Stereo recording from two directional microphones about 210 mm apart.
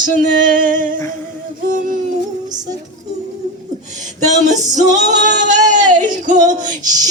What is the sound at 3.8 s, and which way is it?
Speech, 35° right (ahead or behind).